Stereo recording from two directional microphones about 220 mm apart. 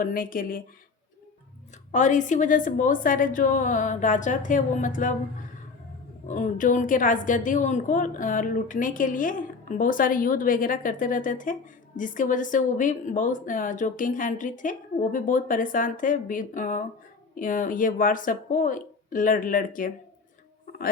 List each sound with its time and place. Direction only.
0.0 s a woman's voice: 40° left (ahead or behind)
1.9 s a woman's voice: 35° left (ahead or behind)
6.2 s a woman's voice: 35° left (ahead or behind)
20.7 s a sound: 40° left (ahead or behind)